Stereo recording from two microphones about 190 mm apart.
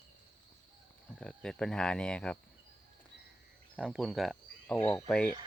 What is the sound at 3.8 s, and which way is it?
Speech, 5° right (ahead or behind).